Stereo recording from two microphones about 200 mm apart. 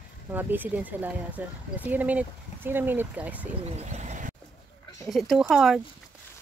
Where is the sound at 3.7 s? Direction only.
35° right (ahead or behind).